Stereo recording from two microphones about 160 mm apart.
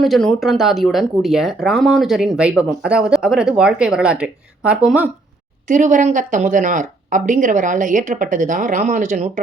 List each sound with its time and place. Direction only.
0.0 s speech: centre (ahead or behind)
5.6 s speech: 55° right (ahead or behind)